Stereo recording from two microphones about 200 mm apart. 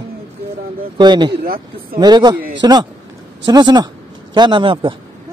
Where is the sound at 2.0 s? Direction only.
20° right (ahead or behind).